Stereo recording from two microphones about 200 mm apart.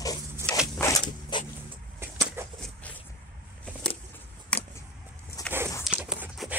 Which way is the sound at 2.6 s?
5° left (ahead or behind).